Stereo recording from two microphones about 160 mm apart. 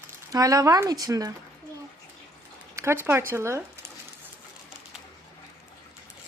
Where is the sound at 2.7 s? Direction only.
15° right (ahead or behind).